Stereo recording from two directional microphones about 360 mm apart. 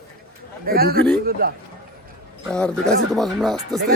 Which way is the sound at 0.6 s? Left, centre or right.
Right.